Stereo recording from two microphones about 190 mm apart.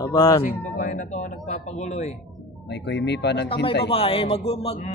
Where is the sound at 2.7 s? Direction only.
65° left (ahead or behind).